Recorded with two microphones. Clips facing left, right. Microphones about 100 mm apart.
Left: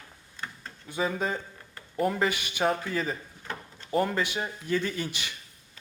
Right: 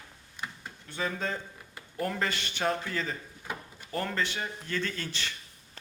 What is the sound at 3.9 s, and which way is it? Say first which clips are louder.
Speech: left 5 dB; 15° left (ahead or behind).